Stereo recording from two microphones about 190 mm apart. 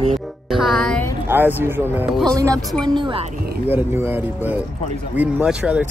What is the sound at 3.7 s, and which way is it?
Speech, 10° right (ahead or behind).